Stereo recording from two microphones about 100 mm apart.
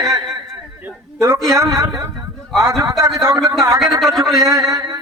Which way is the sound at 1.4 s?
30° right (ahead or behind).